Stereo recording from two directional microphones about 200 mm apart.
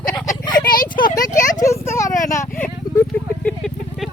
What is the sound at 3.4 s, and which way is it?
Vehicle, 5° left (ahead or behind).